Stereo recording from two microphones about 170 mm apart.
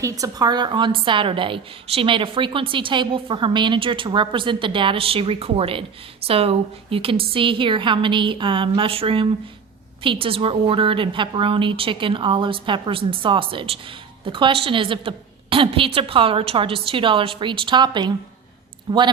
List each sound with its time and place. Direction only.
0.0 s a woman's voice: 20° right (ahead or behind)